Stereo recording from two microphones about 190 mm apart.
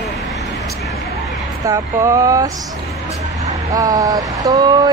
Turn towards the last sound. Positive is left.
turn(degrees=-20)  # may be behind; listen again after turning